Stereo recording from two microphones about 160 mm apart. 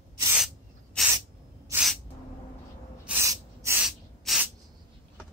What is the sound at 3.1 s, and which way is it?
Snort, 15° right (ahead or behind).